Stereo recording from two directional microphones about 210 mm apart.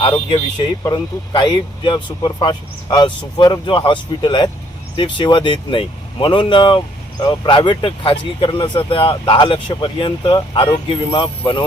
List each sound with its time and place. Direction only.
0.9 s speech: 20° left (ahead or behind)